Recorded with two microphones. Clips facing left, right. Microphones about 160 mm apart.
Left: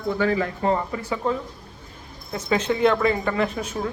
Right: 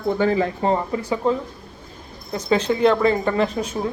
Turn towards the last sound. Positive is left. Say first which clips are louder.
# right 3 dB
turn(degrees=-30)  # may be behind; listen again after turning